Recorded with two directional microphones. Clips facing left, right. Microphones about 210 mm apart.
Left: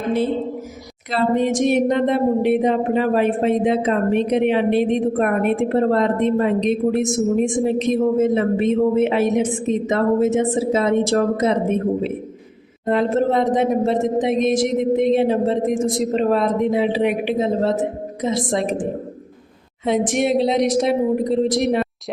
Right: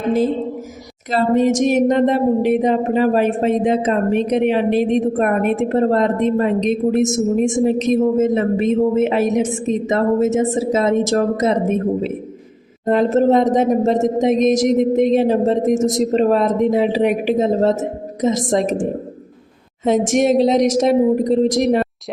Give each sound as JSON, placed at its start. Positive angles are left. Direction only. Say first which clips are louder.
{"t": 1.1, "sound": "speech", "louder": "right 3 dB", "side_deg": -45}
{"t": 12.8, "sound": "speech", "louder": "right 4 dB", "side_deg": -40}